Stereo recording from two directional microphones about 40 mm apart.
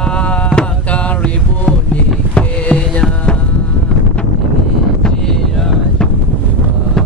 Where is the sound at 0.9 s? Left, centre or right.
Left.